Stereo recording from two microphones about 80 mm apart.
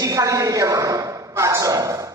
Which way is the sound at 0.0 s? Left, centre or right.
Right.